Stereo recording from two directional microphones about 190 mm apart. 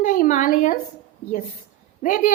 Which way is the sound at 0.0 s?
45° left (ahead or behind).